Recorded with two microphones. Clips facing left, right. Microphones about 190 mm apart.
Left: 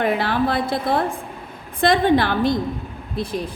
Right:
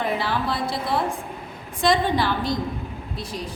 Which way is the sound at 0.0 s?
60° left (ahead or behind).